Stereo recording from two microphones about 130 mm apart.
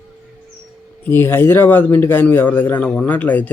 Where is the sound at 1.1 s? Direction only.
20° left (ahead or behind).